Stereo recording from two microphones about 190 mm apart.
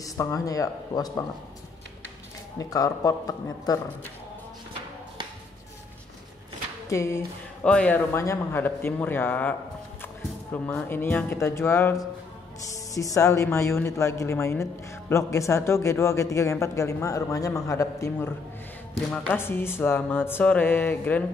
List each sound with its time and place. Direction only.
0.0 s speech: 20° left (ahead or behind)
2.6 s a man's voice: 20° left (ahead or behind)
6.9 s speech: 15° left (ahead or behind)